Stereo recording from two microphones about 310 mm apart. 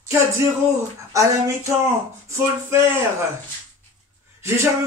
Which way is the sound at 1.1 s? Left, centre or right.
Centre.